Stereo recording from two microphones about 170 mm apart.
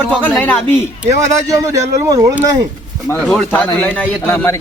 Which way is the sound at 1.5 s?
20° right (ahead or behind).